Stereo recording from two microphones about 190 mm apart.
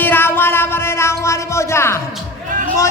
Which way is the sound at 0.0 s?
10° left (ahead or behind).